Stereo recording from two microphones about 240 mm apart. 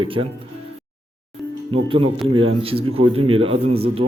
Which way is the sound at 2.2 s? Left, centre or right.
Right.